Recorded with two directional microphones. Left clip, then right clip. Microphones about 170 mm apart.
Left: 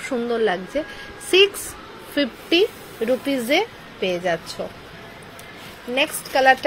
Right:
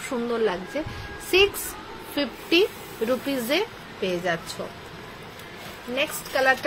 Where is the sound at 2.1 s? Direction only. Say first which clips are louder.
Left 3 dB; 20° left (ahead or behind).